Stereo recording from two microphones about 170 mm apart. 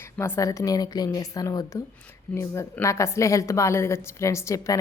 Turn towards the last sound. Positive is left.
turn(degrees=20)  # may be behind; listen again after turning